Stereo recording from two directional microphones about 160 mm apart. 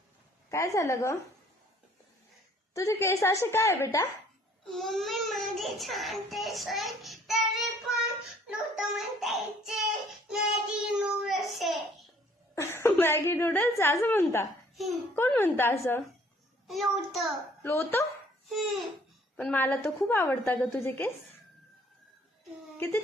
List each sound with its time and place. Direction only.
0.5 s a woman's voice: 20° left (ahead or behind)
2.7 s a woman's voice: 15° left (ahead or behind)
4.7 s a child's voice: centre (ahead or behind)
8.5 s child singing: centre (ahead or behind)
12.5 s a woman's voice: 15° left (ahead or behind)
16.6 s a child's voice: centre (ahead or behind)
17.6 s a woman's voice: 15° left (ahead or behind)
18.4 s a child's voice: centre (ahead or behind)
19.4 s a woman's voice: 10° left (ahead or behind)